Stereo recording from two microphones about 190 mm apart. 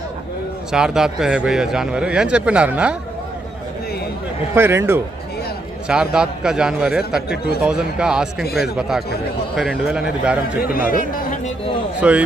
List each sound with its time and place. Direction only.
0.7 s a man's voice: 5° right (ahead or behind)
4.5 s a man's voice: 10° right (ahead or behind)
10.7 s speech: 50° left (ahead or behind)
11.9 s speech: 5° right (ahead or behind)